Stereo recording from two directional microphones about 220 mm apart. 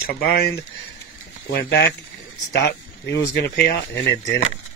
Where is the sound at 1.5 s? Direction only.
45° left (ahead or behind).